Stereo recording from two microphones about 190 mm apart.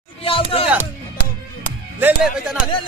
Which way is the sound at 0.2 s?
30° left (ahead or behind).